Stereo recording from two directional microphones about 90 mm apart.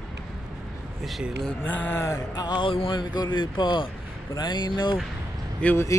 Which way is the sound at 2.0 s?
45° left (ahead or behind).